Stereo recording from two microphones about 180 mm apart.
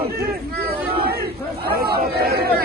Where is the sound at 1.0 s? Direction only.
60° right (ahead or behind).